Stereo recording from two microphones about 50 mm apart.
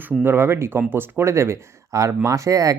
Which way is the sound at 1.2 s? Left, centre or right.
Right.